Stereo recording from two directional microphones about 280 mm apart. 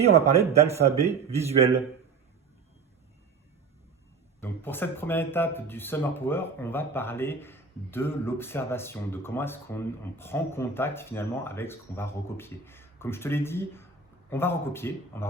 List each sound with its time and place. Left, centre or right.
0.0 s speech: right
4.4 s speech: centre